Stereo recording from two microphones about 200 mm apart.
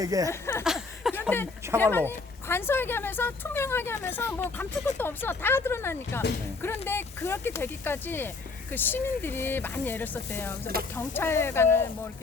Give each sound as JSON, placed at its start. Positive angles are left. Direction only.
{"t": 0.0, "sound": "speech", "side_deg": -15}
{"t": 0.3, "sound": "speech", "side_deg": 15}
{"t": 0.6, "sound": "a sound", "side_deg": 0}
{"t": 1.3, "sound": "speech", "side_deg": 10}